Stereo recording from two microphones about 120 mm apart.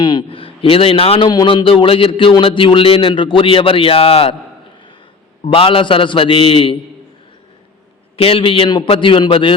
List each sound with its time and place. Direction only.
0.0 s a man's voice: 40° left (ahead or behind)
1.3 s a man's voice: 35° left (ahead or behind); by 4.4 s 55° left (ahead or behind)
5.5 s a man's voice: 50° left (ahead or behind)
8.1 s a man's voice: 50° left (ahead or behind)